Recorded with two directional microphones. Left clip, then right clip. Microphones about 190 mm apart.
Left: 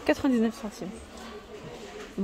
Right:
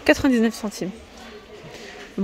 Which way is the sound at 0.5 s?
30° right (ahead or behind).